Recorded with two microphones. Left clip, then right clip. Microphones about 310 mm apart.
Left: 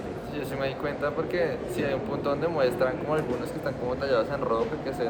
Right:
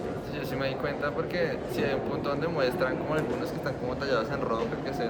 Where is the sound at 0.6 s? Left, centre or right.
Centre.